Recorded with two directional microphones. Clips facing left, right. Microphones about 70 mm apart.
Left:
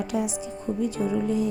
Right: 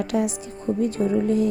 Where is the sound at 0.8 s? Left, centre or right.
Right.